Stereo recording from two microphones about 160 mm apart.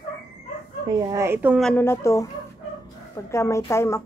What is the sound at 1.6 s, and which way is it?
Speech, 15° left (ahead or behind).